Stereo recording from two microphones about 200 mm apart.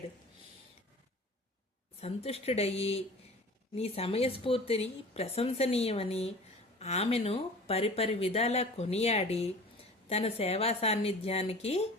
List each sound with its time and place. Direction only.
2.0 s speech: 30° left (ahead or behind)